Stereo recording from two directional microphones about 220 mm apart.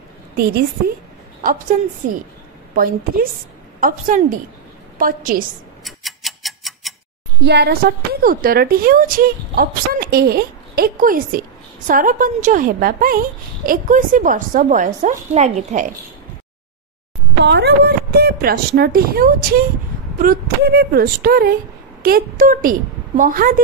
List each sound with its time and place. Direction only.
0.4 s a woman's voice: 45° right (ahead or behind)
2.7 s a woman's voice: 40° right (ahead or behind)
5.9 s tick-tock: centre (ahead or behind)
7.4 s a woman's voice: 50° right (ahead or behind); by 15.9 s 35° right (ahead or behind)
17.5 s a woman's voice: 50° right (ahead or behind)